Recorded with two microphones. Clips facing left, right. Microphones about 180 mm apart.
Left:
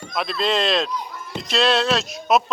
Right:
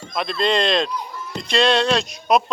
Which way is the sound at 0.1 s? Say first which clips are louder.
Right 2 dB; centre (ahead or behind).